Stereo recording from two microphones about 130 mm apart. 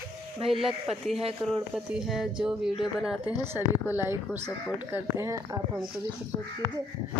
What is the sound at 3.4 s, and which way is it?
Speech, 20° right (ahead or behind).